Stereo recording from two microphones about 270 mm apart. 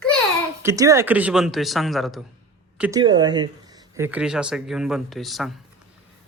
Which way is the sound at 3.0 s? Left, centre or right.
Centre.